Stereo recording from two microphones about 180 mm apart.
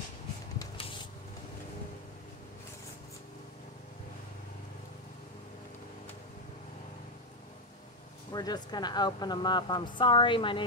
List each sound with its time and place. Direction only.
0.6 s spray: 30° left (ahead or behind)
8.3 s speech: 20° left (ahead or behind)